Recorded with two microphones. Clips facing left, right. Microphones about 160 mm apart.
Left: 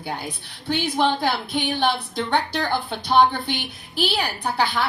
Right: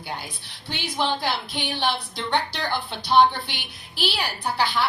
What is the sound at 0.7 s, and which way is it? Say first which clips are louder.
A woman's voice: left 5 dB; 50° left (ahead or behind).